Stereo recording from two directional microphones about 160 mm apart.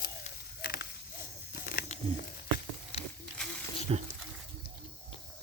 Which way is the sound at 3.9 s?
45° right (ahead or behind).